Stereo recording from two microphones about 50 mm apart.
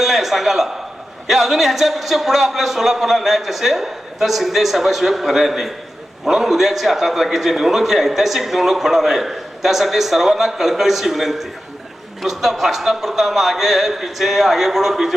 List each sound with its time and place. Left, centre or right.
0.0 s a man's voice: centre